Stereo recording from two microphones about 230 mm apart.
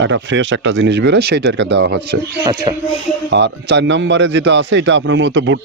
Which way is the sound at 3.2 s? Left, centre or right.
Right.